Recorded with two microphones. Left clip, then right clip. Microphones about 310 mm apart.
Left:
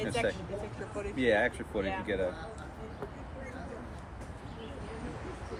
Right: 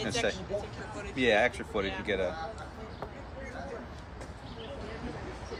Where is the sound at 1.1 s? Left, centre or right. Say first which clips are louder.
Right 2 dB; centre.